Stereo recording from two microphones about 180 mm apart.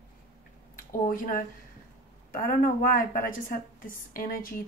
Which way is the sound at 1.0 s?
50° left (ahead or behind).